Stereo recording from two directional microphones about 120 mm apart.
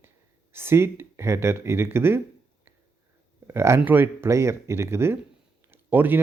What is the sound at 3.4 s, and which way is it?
Speech, 20° right (ahead or behind).